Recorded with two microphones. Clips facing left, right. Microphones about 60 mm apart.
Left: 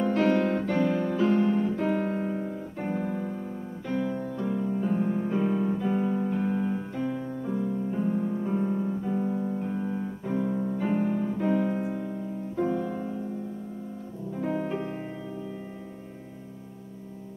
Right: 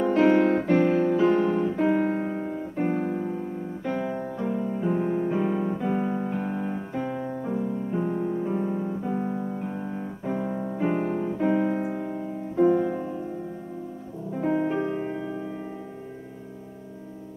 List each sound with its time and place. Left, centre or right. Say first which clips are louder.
0.0 s music: right 4 dB; right
3.8 s guitar: even; right
4.7 s music: right 3 dB; right
11.0 s piano: right 1 dB; right
12.1 s music: right 2 dB; right
14.4 s music: right 5 dB; centre
15.0 s music: right 7 dB; right